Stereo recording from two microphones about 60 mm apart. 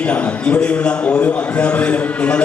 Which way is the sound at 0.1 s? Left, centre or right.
Left.